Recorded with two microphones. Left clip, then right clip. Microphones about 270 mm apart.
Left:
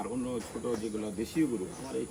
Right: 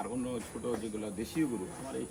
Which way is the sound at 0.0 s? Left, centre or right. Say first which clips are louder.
Left 2 dB; centre.